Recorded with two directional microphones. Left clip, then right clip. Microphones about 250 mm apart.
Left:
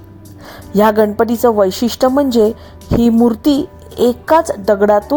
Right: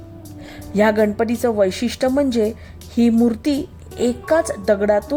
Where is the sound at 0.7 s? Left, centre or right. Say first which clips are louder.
Left 5 dB; centre.